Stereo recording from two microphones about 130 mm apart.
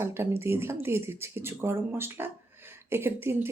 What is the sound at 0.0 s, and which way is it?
Speech, 20° right (ahead or behind).